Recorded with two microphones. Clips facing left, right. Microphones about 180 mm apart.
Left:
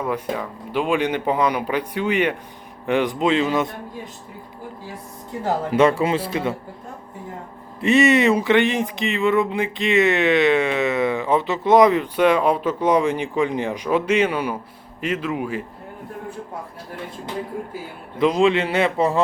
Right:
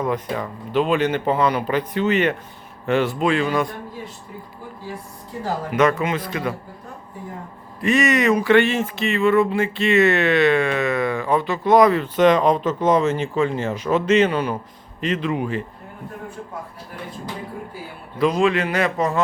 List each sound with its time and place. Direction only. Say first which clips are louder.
0.0 s a man's voice: right 1 dB; 10° left (ahead or behind)
5.4 s a man's voice: left 2 dB; 30° left (ahead or behind)
7.8 s speech: left 3 dB; 25° left (ahead or behind); by 15.6 s 5° left (ahead or behind)
18.2 s a man's voice: left 1 dB; 20° left (ahead or behind)